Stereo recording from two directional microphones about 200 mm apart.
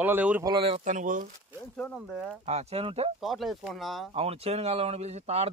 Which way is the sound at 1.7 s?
5° left (ahead or behind).